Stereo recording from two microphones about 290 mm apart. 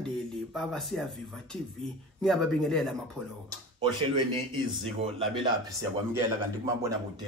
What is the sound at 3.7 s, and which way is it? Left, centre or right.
Speech, centre.